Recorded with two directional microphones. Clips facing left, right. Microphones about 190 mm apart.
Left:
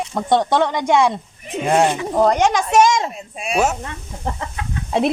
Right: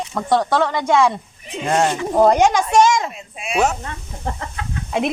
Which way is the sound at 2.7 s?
10° left (ahead or behind).